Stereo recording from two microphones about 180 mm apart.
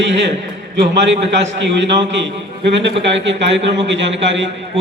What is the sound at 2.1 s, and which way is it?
A man's voice, 80° right.